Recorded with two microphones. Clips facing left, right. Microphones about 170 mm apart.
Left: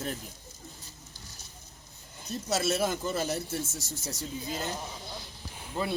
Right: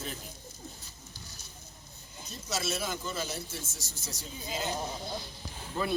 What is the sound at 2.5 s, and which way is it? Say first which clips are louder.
Speech: left 6 dB; 60° left (ahead or behind).